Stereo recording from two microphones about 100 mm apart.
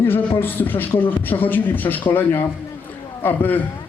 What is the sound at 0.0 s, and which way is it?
Speech, 20° left (ahead or behind).